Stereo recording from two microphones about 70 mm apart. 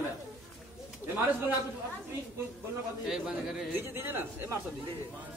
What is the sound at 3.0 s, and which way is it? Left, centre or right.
Speech, centre.